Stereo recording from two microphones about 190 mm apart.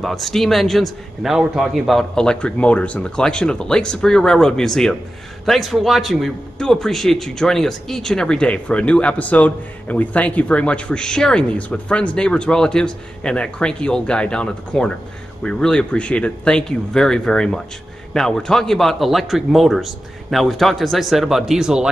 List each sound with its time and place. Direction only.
0.0 s a man's voice: centre (ahead or behind)